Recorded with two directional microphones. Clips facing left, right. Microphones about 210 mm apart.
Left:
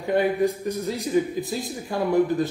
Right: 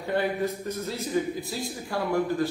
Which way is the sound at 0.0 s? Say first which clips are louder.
Left 5 dB; 15° left (ahead or behind).